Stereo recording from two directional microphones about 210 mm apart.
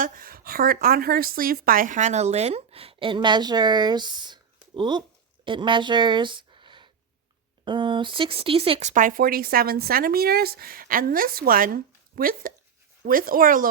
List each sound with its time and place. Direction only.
0.0 s a woman's voice: 45° right (ahead or behind)